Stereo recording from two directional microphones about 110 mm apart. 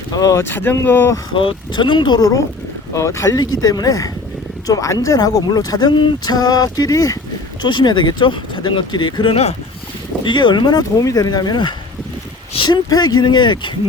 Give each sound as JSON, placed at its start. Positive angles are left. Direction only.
{"t": 0.2, "sound": "speech", "side_deg": 25}
{"t": 1.4, "sound": "speech", "side_deg": 50}
{"t": 7.6, "sound": "speech", "side_deg": 45}
{"t": 10.2, "sound": "speech", "side_deg": 45}